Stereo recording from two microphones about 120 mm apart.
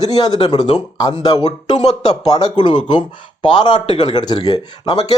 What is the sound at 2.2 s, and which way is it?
Speech, 35° left (ahead or behind).